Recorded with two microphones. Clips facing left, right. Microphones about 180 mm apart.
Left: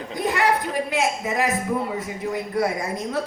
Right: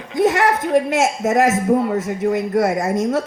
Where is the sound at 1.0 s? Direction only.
45° right (ahead or behind).